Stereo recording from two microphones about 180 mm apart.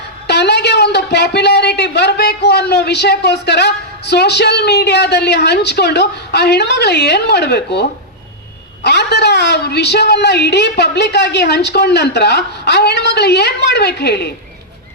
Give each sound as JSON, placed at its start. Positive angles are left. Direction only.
{"t": 0.3, "sound": "a woman's voice", "side_deg": 70}